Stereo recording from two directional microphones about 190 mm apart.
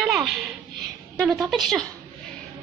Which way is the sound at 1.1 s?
5° left (ahead or behind).